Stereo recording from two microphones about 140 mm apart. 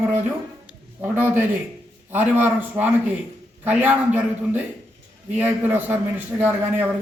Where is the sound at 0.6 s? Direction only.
10° right (ahead or behind).